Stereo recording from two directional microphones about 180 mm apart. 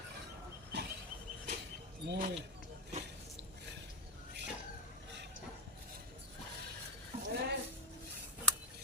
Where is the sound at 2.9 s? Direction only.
35° right (ahead or behind).